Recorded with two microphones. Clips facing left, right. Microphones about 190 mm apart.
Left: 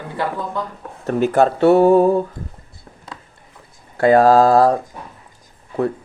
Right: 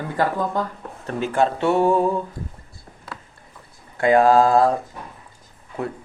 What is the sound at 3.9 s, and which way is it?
Speech, 35° left (ahead or behind).